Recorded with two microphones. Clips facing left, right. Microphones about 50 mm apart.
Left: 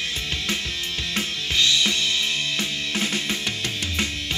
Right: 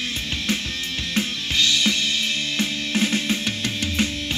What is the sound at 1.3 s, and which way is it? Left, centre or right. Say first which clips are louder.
Drum kit: left 3 dB; left.